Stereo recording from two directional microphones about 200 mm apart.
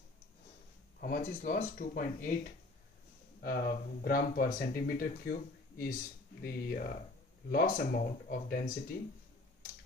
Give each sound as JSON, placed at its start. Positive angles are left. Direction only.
{"t": 1.0, "sound": "speech", "side_deg": 45}
{"t": 3.4, "sound": "speech", "side_deg": 50}